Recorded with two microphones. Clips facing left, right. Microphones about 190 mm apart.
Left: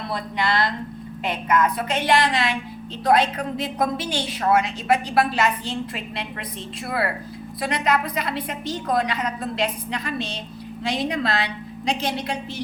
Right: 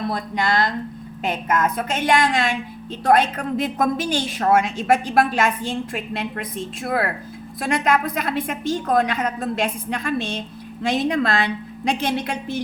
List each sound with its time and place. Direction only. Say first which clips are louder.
0.1 s a woman's voice: left 3 dB; 45° right (ahead or behind)